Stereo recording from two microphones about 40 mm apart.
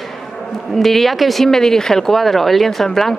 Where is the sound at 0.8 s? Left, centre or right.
Centre.